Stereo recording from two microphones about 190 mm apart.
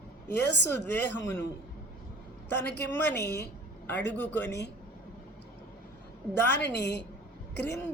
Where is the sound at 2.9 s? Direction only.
10° left (ahead or behind).